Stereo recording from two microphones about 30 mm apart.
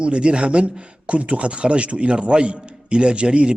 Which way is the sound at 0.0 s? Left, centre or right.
Right.